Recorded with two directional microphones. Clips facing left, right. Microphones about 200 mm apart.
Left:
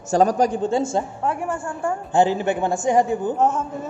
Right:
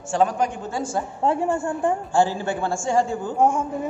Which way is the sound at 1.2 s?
25° right (ahead or behind).